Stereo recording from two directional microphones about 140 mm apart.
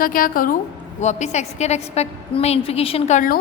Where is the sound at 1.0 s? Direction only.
55° left (ahead or behind).